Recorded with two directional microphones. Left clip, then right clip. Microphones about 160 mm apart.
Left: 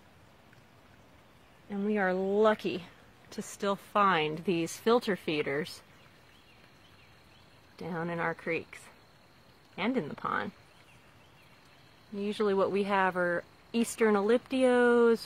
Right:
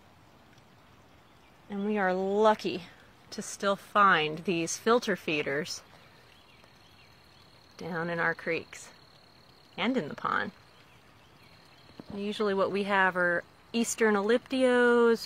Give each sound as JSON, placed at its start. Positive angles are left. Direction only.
{"t": 1.7, "sound": "speech", "side_deg": 20}
{"t": 7.7, "sound": "speech", "side_deg": 0}
{"t": 12.2, "sound": "speech", "side_deg": 15}